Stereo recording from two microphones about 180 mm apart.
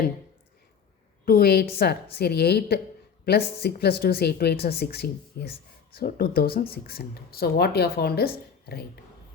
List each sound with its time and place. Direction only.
1.2 s a woman's voice: 60° left (ahead or behind)